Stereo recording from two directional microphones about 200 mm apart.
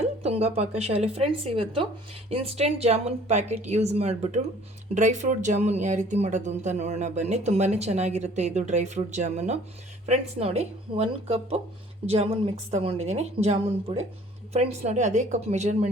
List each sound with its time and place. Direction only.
0.2 s speech: 30° right (ahead or behind)